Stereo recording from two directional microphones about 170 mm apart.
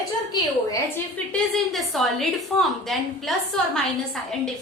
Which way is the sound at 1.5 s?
Centre (ahead or behind).